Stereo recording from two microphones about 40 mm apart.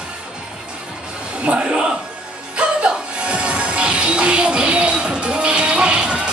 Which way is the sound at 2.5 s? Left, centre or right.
Right.